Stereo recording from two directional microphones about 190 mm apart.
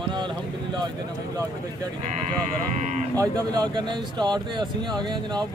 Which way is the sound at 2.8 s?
40° right (ahead or behind).